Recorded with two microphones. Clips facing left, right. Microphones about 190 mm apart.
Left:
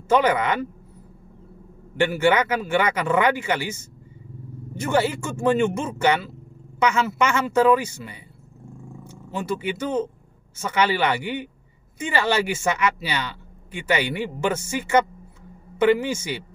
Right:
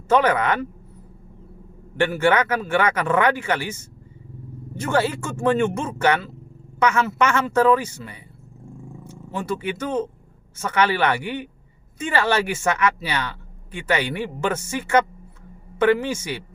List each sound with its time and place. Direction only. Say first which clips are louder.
0.1 s speech: right 1 dB; 15° left (ahead or behind)
2.0 s speech: even; 15° left (ahead or behind)